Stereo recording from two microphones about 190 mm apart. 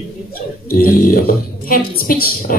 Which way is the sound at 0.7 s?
50° left (ahead or behind).